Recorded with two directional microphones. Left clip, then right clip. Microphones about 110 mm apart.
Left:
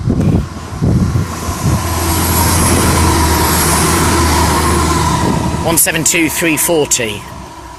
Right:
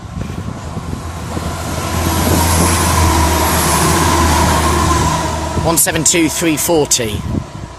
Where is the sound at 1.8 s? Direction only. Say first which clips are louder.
Right 1 dB; 15° right (ahead or behind).